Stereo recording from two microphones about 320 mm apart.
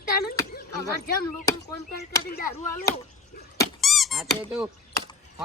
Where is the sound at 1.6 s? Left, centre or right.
Centre.